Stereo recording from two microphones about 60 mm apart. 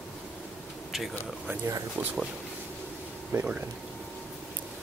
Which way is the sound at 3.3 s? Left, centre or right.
Right.